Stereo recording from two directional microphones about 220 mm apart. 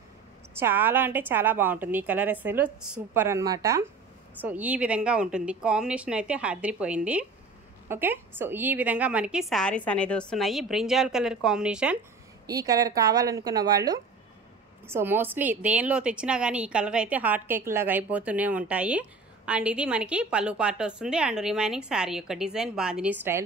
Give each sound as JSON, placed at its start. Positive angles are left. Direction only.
{"t": 0.6, "sound": "a woman's voice", "side_deg": -10}
{"t": 12.4, "sound": "a woman's voice", "side_deg": -15}